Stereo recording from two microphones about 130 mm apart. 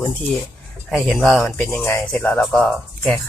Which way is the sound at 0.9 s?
Centre (ahead or behind).